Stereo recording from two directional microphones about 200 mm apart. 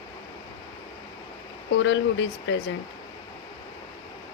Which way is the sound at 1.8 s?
65° left (ahead or behind).